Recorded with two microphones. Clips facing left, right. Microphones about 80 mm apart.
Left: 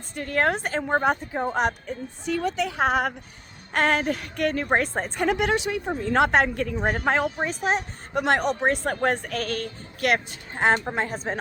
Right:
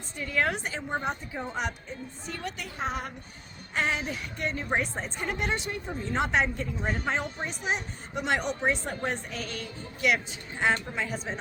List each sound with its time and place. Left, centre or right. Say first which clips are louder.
0.2 s a woman's voice: left 5 dB; left
2.2 s a woman's voice: left 13 dB; left
3.7 s speech: left 7 dB; left
5.2 s a woman's voice: left 9 dB; left